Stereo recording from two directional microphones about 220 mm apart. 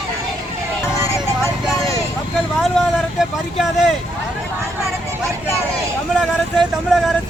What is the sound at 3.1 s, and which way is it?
Speech, centre (ahead or behind).